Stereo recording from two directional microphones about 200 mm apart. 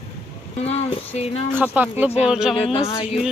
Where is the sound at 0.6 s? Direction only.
30° left (ahead or behind).